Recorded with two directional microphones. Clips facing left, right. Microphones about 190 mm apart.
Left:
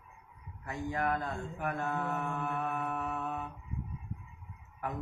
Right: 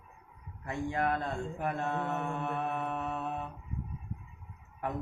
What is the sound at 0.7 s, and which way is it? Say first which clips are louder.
Mantra: right 2 dB; 30° right (ahead or behind).